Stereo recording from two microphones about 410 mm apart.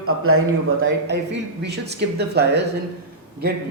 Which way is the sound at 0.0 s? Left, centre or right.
Right.